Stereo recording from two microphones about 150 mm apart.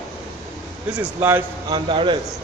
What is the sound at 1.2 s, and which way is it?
Speech, 15° right (ahead or behind).